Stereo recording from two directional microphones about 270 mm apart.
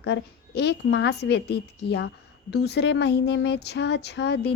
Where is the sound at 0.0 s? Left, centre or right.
Left.